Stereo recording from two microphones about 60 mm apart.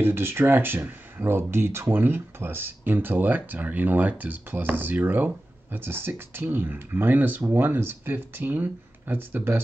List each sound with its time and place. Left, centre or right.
0.0 s speech: right